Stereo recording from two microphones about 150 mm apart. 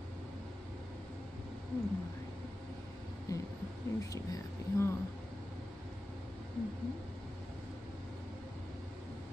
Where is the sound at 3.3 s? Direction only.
20° left (ahead or behind).